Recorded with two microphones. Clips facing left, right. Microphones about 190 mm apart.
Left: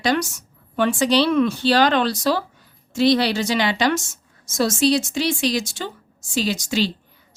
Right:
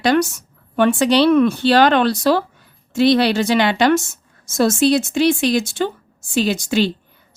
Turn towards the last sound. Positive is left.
turn(degrees=-55)  # may be behind; listen again after turning